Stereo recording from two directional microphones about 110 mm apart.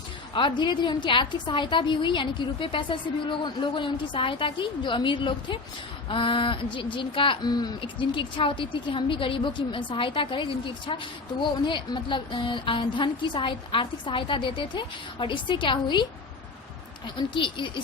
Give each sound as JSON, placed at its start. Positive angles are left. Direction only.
{"t": 0.3, "sound": "a woman's voice", "side_deg": 45}
{"t": 7.5, "sound": "speech", "side_deg": 35}
{"t": 7.8, "sound": "a woman's voice", "side_deg": 50}
{"t": 17.2, "sound": "a woman's voice", "side_deg": 50}